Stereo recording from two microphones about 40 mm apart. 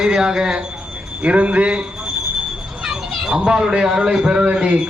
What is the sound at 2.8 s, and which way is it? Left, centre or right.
A man's voice, centre.